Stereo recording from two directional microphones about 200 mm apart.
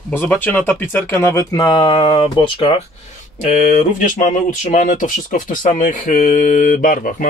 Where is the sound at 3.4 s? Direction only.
40° left (ahead or behind).